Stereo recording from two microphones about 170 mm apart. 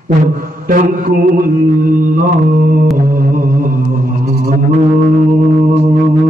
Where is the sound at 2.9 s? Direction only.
55° right (ahead or behind).